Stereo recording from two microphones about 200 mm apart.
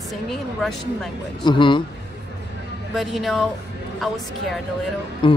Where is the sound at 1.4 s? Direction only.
25° left (ahead or behind).